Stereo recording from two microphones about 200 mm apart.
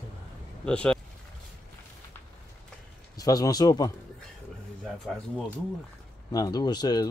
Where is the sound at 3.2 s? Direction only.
20° left (ahead or behind).